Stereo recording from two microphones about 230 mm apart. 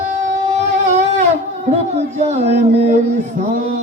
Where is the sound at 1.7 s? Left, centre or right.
Right.